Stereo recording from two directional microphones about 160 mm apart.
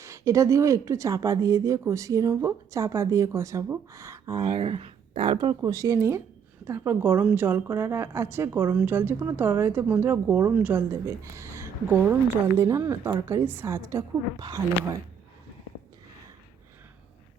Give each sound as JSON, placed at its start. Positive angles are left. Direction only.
{"t": 0.0, "sound": "speech", "side_deg": -20}
{"t": 4.4, "sound": "a woman's voice", "side_deg": -30}